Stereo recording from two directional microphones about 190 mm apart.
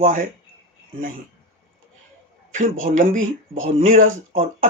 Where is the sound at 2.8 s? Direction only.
40° right (ahead or behind).